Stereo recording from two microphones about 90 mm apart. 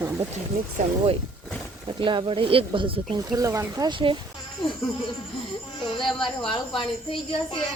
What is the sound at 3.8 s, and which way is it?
Speech, 60° right (ahead or behind).